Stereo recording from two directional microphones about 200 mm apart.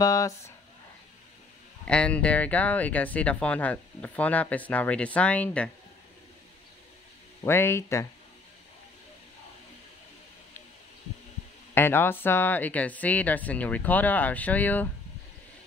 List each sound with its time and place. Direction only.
0.0 s speech: 15° left (ahead or behind)
1.9 s speech: 5° left (ahead or behind)
7.4 s speech: 10° left (ahead or behind)
11.7 s speech: 10° left (ahead or behind)